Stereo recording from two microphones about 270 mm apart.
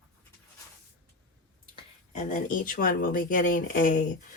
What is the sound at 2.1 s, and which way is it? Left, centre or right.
Speech, left.